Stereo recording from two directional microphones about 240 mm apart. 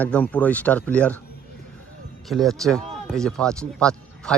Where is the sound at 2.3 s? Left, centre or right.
Centre.